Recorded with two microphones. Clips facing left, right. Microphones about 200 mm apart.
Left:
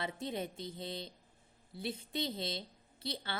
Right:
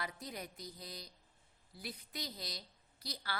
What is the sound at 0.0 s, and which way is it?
A woman's voice, 25° left (ahead or behind).